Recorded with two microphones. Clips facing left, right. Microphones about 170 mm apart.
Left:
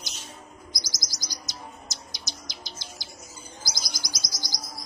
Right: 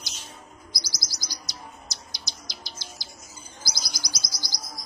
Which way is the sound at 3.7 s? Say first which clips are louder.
Right 1 dB; 20° left (ahead or behind).